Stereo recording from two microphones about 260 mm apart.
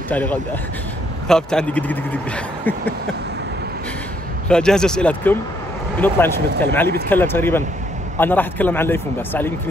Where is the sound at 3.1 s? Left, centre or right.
Right.